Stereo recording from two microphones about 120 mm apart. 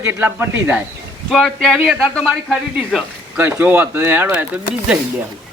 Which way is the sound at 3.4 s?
15° right (ahead or behind).